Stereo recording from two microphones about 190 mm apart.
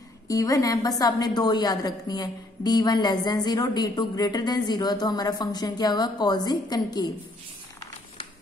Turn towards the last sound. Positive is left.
turn(degrees=20)  # may be behind; listen again after turning